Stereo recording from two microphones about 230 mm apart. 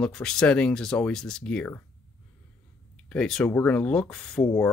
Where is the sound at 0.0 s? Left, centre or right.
Centre.